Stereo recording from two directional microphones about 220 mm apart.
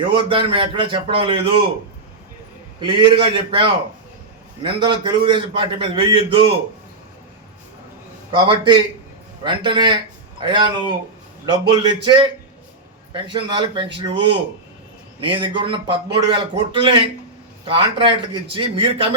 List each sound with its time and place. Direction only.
0.1 s a man's voice: 25° right (ahead or behind)
2.8 s a man's voice: 20° right (ahead or behind)
8.4 s a man's voice: 20° right (ahead or behind)